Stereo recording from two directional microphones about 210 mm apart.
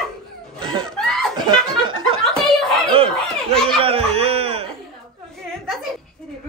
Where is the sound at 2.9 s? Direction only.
25° right (ahead or behind).